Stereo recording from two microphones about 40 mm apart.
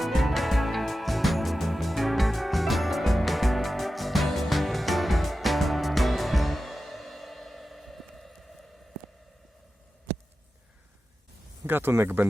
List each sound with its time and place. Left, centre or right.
0.0 s music: centre
11.6 s speech: right